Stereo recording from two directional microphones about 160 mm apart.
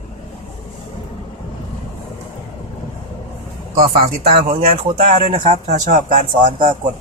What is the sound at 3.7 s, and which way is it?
Speech, 60° right (ahead or behind).